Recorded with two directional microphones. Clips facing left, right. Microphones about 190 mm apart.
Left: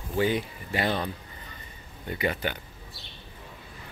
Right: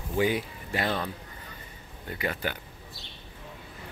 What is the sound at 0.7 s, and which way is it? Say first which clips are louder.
Speech: left 2 dB; 5° left (ahead or behind).